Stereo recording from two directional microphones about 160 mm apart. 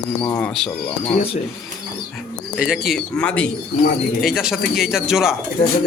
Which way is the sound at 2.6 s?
5° right (ahead or behind).